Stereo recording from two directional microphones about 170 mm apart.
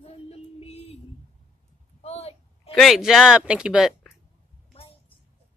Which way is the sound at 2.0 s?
35° left (ahead or behind).